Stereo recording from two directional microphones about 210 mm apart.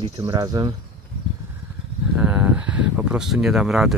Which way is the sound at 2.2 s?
10° right (ahead or behind).